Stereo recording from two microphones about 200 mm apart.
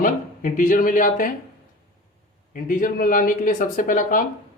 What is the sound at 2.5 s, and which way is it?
Speech, 40° left (ahead or behind).